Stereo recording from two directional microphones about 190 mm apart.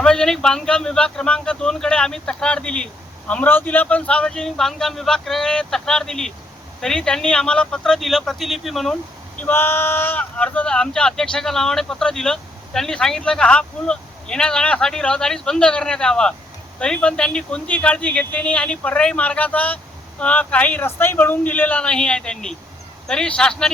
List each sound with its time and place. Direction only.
0.0 s speech: 5° left (ahead or behind)
9.4 s speech: 10° left (ahead or behind)